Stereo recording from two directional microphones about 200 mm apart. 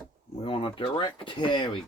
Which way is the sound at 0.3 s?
25° left (ahead or behind).